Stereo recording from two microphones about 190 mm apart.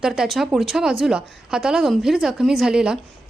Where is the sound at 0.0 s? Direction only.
Centre (ahead or behind).